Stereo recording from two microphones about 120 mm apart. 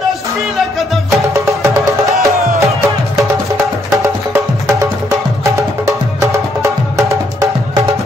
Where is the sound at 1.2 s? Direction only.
25° right (ahead or behind).